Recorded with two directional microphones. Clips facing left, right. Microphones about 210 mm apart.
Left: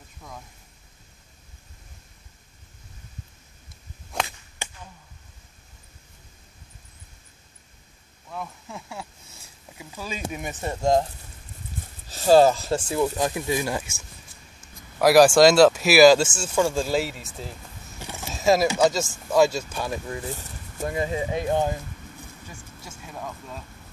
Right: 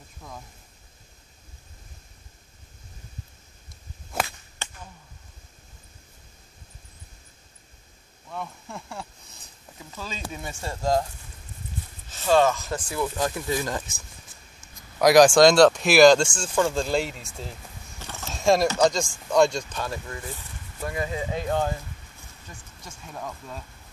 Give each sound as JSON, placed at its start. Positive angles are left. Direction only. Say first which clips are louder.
{"t": 4.1, "sound": "whip", "louder": "right 1 dB", "side_deg": -5}
{"t": 4.6, "sound": "a sound", "louder": "left 2 dB", "side_deg": 15}
{"t": 8.3, "sound": "speech", "louder": "even", "side_deg": 0}
{"t": 12.1, "sound": "speech", "louder": "left 4 dB", "side_deg": 35}
{"t": 15.0, "sound": "speech", "louder": "even", "side_deg": 5}
{"t": 17.9, "sound": "power windows", "louder": "left 2 dB", "side_deg": 15}
{"t": 19.3, "sound": "speech", "louder": "left 1 dB", "side_deg": 5}
{"t": 22.5, "sound": "speech", "louder": "left 2 dB", "side_deg": 5}